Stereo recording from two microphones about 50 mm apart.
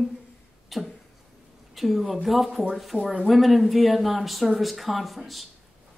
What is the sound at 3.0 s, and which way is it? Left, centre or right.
Speech, centre.